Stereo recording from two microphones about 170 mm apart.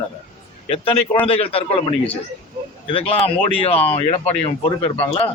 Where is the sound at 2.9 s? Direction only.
35° left (ahead or behind).